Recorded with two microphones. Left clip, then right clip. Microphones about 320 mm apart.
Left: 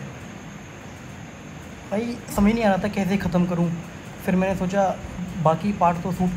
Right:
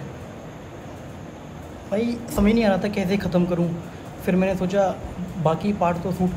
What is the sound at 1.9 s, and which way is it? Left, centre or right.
Speech, centre.